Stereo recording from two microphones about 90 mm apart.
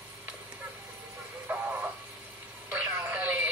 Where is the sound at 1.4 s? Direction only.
20° right (ahead or behind).